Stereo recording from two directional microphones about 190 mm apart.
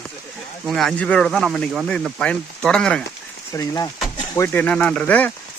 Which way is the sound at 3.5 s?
15° left (ahead or behind).